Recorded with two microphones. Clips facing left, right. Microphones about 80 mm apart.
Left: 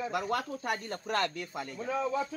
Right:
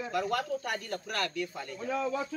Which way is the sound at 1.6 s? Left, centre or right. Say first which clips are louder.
Left 2 dB; centre.